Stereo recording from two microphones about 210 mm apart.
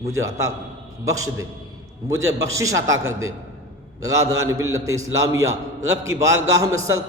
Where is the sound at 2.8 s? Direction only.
65° right (ahead or behind).